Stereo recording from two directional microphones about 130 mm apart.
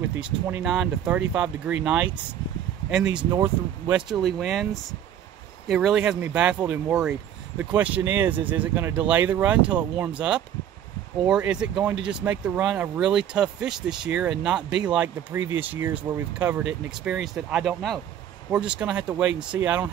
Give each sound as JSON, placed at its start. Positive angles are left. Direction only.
{"t": 0.2, "sound": "speech", "side_deg": -10}
{"t": 3.3, "sound": "speech", "side_deg": -20}
{"t": 3.9, "sound": "speech", "side_deg": -5}
{"t": 5.7, "sound": "speech", "side_deg": 0}